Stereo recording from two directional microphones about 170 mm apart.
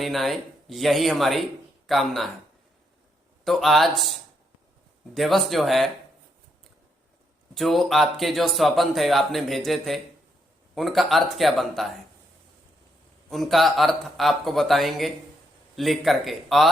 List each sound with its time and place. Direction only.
0.0 s speech: centre (ahead or behind)
3.4 s speech: centre (ahead or behind)
7.5 s speech: centre (ahead or behind)
13.3 s speech: centre (ahead or behind)